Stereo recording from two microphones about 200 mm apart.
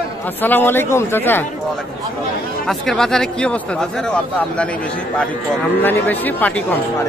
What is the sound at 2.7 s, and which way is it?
Speech, centre (ahead or behind).